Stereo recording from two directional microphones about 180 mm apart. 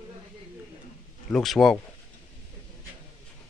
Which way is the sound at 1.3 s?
Centre (ahead or behind).